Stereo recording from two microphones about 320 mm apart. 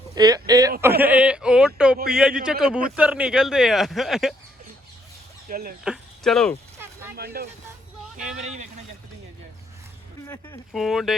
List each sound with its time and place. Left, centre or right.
0.2 s speech: centre
5.5 s speech: right
5.8 s a sound: centre
7.3 s speech: right
10.2 s speech: centre